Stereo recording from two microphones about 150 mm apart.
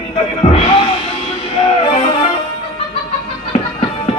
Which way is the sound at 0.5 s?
45° left (ahead or behind).